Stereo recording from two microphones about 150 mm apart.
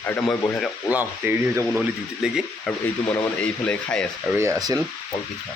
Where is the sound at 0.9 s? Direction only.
10° right (ahead or behind).